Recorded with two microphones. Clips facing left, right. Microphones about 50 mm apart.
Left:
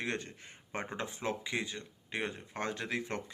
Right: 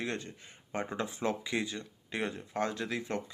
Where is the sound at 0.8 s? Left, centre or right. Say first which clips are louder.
Right 3 dB; left.